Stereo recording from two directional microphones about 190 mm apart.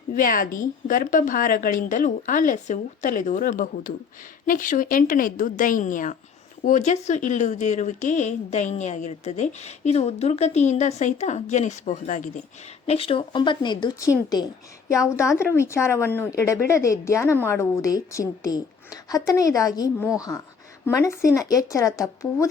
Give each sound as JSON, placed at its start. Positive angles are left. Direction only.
{"t": 0.1, "sound": "a woman's voice", "side_deg": 45}